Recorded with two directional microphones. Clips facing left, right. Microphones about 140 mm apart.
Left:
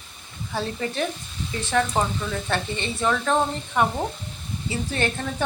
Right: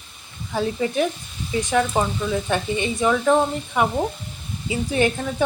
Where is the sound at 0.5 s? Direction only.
15° right (ahead or behind).